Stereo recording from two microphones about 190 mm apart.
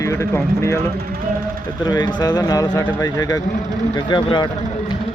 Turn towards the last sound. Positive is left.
turn(degrees=25)  # may be behind; listen again after turning